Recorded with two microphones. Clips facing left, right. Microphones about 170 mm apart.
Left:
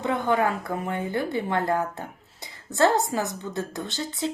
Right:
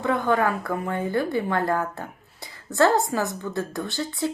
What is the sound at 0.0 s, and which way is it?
Speech, 20° left (ahead or behind).